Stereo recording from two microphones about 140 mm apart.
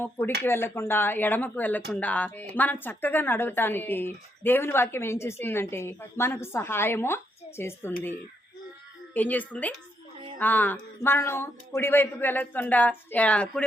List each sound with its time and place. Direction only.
0.0 s speech: 15° left (ahead or behind)
9.1 s speech: 10° left (ahead or behind)